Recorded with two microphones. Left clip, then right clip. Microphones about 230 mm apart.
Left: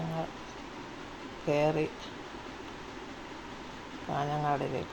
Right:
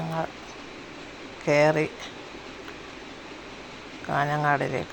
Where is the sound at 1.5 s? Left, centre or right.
Centre.